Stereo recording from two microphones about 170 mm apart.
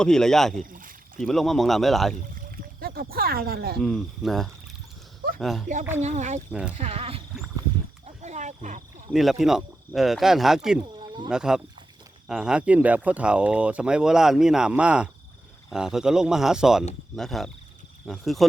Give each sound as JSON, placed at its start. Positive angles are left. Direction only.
{"t": 0.0, "sound": "speech", "side_deg": 5}
{"t": 0.7, "sound": "a sound", "side_deg": -55}
{"t": 1.2, "sound": "speech", "side_deg": 0}
{"t": 2.4, "sound": "rowboat", "side_deg": -60}
{"t": 3.8, "sound": "speech", "side_deg": 0}
{"t": 6.0, "sound": "speech", "side_deg": -45}
{"t": 6.5, "sound": "speech", "side_deg": -5}
{"t": 6.7, "sound": "speech", "side_deg": -35}
{"t": 8.0, "sound": "wild animals", "side_deg": -45}
{"t": 9.1, "sound": "speech", "side_deg": 0}
{"t": 11.0, "sound": "insect", "side_deg": -25}
{"t": 11.3, "sound": "speech", "side_deg": -5}